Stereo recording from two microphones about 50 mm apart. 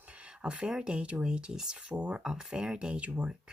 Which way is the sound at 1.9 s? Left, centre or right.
Right.